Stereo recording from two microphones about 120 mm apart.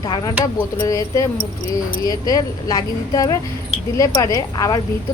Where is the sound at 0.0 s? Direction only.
35° left (ahead or behind).